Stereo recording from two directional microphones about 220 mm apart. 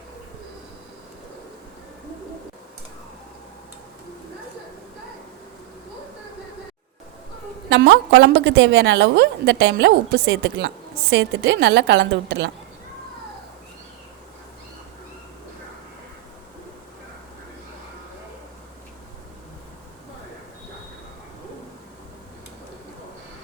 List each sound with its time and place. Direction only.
7.7 s a woman's voice: 50° right (ahead or behind)